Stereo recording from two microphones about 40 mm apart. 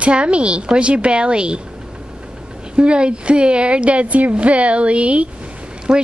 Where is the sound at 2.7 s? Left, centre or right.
Right.